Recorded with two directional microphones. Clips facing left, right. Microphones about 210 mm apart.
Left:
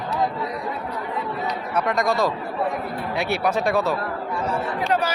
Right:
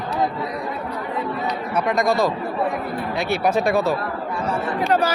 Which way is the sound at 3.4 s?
5° right (ahead or behind).